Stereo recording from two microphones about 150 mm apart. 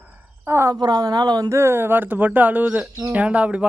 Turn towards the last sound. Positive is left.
turn(degrees=-10)  # may be behind; listen again after turning